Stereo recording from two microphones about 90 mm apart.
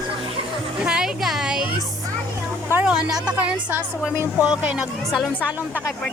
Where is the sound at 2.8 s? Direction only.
10° right (ahead or behind).